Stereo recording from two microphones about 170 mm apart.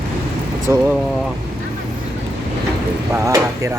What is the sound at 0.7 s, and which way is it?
Speech, 15° right (ahead or behind).